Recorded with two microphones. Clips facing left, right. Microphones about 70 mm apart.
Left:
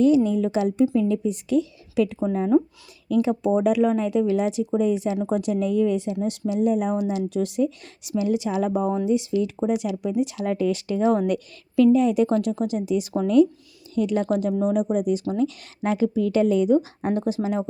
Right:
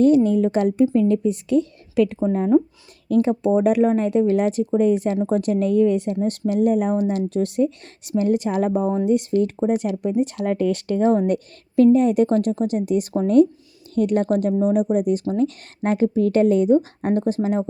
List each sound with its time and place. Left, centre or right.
0.0 s a woman's voice: right